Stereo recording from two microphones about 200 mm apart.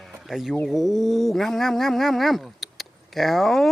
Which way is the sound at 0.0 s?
Centre (ahead or behind).